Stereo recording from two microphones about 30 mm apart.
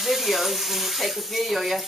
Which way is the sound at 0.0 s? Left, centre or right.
Centre.